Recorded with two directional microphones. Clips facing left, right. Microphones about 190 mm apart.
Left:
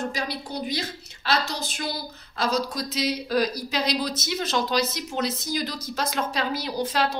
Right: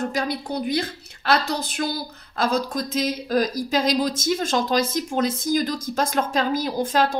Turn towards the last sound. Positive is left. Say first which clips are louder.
# right 4 dB
turn(degrees=-50)  # may be behind; listen again after turning